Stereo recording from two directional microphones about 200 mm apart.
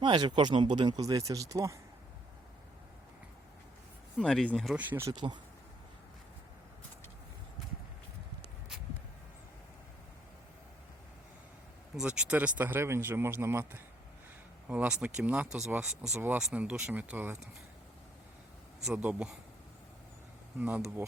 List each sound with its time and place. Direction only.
0.0 s speech: 20° right (ahead or behind)
4.2 s speech: 5° left (ahead or behind); by 5.4 s 20° right (ahead or behind)
11.9 s speech: 5° right (ahead or behind)
18.9 s speech: 5° right (ahead or behind)
20.6 s speech: 10° right (ahead or behind)